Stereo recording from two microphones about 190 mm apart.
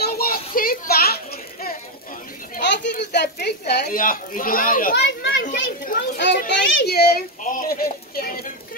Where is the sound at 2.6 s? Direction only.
65° left (ahead or behind); by 4.9 s 45° left (ahead or behind).